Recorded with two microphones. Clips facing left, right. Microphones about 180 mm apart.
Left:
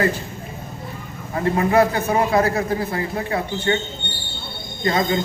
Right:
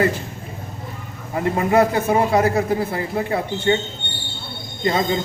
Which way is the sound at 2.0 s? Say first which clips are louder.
Right 1 dB; 10° right (ahead or behind).